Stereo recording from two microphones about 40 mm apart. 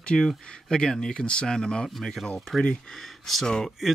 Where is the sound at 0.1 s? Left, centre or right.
Centre.